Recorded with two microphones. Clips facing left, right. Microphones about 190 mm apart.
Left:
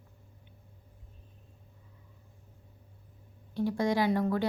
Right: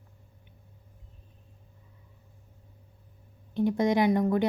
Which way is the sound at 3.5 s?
20° right (ahead or behind).